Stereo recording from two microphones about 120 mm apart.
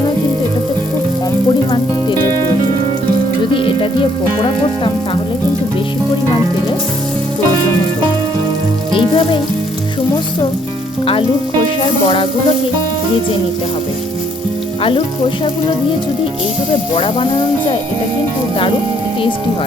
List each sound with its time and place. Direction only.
3.5 s music: 45° left (ahead or behind)
8.9 s frying: 45° left (ahead or behind)
11.0 s frying: 50° left (ahead or behind)
16.9 s speech: 45° left (ahead or behind)